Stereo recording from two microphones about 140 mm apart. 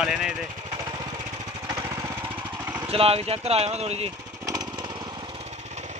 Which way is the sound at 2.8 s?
45° right (ahead or behind).